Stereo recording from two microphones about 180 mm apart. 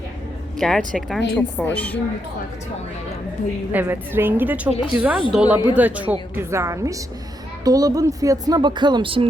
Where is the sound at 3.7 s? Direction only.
10° right (ahead or behind).